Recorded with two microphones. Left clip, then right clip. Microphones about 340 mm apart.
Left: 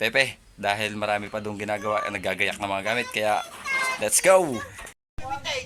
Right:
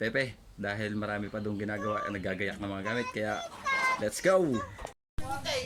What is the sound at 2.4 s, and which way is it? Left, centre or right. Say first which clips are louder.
Speech: left 9 dB; centre.